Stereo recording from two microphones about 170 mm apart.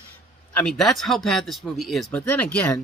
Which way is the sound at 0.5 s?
5° left (ahead or behind).